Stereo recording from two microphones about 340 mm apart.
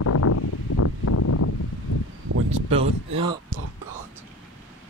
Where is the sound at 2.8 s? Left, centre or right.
Right.